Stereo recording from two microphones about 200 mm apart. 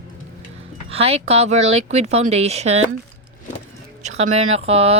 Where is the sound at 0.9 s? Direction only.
30° right (ahead or behind).